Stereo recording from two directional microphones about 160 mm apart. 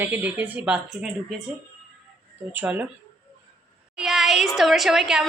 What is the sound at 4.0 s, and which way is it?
A woman's voice, centre (ahead or behind).